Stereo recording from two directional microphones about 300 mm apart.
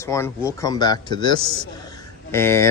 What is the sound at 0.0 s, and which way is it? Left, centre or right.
Speech, centre.